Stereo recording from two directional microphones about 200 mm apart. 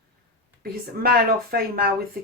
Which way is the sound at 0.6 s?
50° right (ahead or behind).